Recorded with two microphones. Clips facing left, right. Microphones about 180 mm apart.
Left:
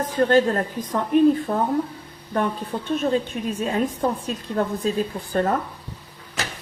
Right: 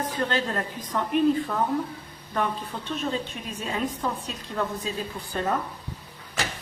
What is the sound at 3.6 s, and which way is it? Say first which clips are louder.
A woman's voice: left 5 dB; 45° left (ahead or behind).